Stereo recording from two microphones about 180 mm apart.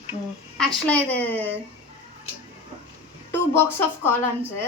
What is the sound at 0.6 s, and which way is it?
Speech, 5° left (ahead or behind).